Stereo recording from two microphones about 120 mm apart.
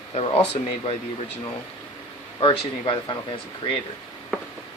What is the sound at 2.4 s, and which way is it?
Speech, 45° left (ahead or behind).